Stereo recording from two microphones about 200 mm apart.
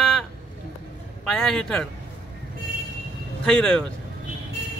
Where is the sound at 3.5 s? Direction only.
5° left (ahead or behind).